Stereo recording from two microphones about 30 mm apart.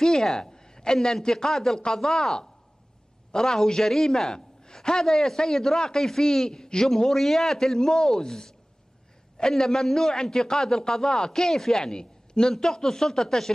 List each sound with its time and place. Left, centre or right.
0.0 s a sound: centre
1.1 s a man's voice: centre
9.4 s a man's voice: centre
11.4 s a man's voice: centre
11.9 s a man's voice: left